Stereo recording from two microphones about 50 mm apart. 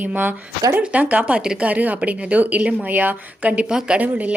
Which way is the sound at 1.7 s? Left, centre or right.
Right.